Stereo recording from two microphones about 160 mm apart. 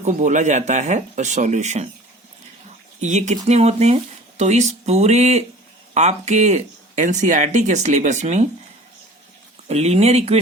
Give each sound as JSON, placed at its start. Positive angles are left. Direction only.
{"t": 0.0, "sound": "speech", "side_deg": -50}
{"t": 3.0, "sound": "speech", "side_deg": -45}
{"t": 9.6, "sound": "speech", "side_deg": -40}